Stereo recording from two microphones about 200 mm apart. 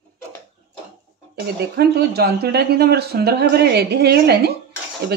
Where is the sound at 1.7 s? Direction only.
55° right (ahead or behind).